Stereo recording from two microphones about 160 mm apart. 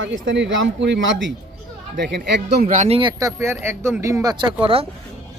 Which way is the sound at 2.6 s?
45° right (ahead or behind).